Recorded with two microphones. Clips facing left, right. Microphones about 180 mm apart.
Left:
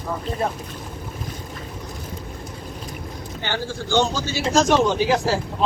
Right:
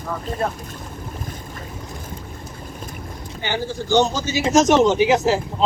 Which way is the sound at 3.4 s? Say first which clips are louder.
Right 3 dB; 15° right (ahead or behind).